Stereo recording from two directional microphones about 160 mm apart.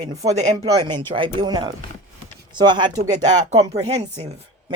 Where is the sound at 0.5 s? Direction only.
25° right (ahead or behind).